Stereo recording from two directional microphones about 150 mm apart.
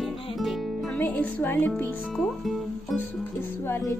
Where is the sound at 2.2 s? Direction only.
Centre (ahead or behind).